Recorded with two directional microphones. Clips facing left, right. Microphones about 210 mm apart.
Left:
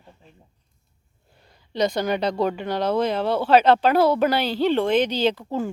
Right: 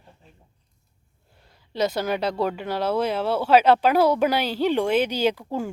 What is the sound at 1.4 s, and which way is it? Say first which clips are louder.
A woman's voice: left 2 dB; 5° right (ahead or behind).